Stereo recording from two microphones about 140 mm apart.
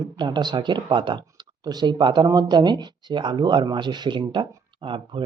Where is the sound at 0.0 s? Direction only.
30° right (ahead or behind).